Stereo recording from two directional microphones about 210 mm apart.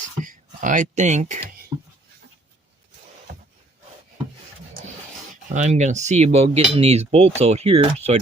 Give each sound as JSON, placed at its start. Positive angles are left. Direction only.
{"t": 0.2, "sound": "speech", "side_deg": -40}
{"t": 5.5, "sound": "speech", "side_deg": -35}